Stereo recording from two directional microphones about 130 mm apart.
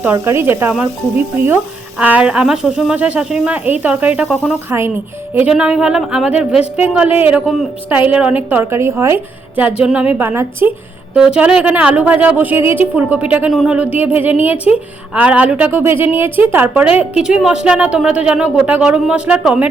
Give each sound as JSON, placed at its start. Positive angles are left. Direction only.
{"t": 0.0, "sound": "a woman's voice", "side_deg": -15}
{"t": 5.5, "sound": "a woman's voice", "side_deg": -5}
{"t": 7.9, "sound": "a woman's voice", "side_deg": -15}